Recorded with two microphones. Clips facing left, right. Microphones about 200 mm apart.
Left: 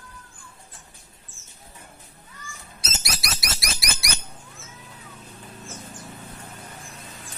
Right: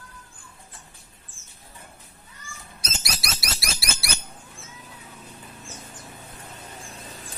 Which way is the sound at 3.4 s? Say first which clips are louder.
Even; 20° left (ahead or behind).